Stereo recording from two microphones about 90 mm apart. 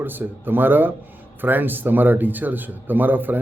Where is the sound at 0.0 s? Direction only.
20° right (ahead or behind).